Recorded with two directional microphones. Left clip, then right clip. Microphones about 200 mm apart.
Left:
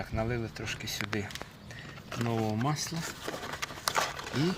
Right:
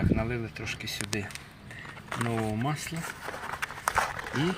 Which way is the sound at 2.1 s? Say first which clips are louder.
Right 2 dB; 20° left (ahead or behind).